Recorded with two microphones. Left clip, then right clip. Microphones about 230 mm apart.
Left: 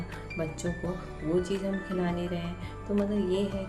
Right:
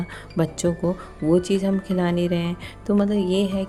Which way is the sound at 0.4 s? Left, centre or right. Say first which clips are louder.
Right 11 dB; right.